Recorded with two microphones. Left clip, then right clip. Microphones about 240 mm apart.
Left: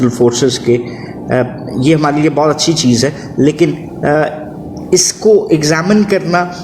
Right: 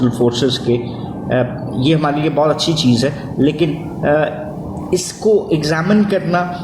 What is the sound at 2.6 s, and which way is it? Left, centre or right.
Speech, left.